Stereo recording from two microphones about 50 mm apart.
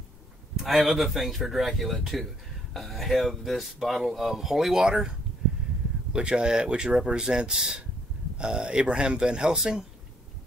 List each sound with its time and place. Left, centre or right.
0.6 s speech: centre
6.1 s speech: centre